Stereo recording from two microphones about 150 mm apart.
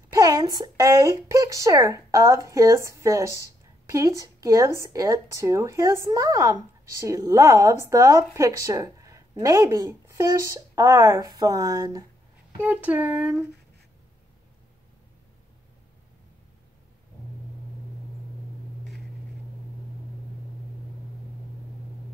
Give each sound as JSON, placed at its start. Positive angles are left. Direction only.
{"t": 0.1, "sound": "speech", "side_deg": -25}
{"t": 12.5, "sound": "speech", "side_deg": -10}